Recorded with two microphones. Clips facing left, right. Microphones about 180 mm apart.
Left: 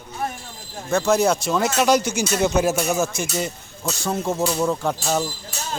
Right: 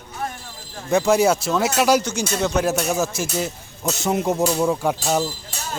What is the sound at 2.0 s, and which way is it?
Speech, 10° left (ahead or behind).